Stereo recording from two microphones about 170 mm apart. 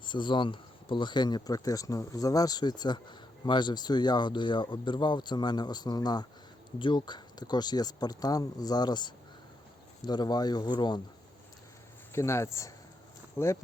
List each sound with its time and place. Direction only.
0.0 s speech: 30° left (ahead or behind)
12.1 s speech: 15° left (ahead or behind)